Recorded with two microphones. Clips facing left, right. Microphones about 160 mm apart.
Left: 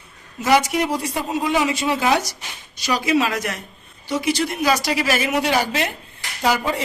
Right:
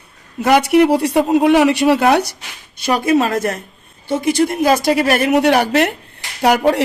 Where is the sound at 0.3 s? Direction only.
60° right (ahead or behind).